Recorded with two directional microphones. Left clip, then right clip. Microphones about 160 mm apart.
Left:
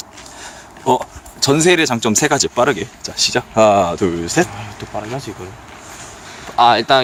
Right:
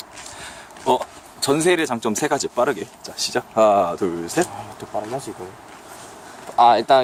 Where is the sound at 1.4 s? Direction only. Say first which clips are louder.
Left 5 dB; 25° left (ahead or behind).